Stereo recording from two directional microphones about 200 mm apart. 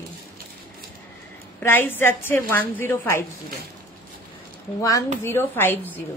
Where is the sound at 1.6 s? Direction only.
10° left (ahead or behind).